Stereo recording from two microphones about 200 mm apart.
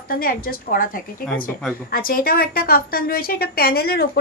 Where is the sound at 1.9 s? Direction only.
45° left (ahead or behind).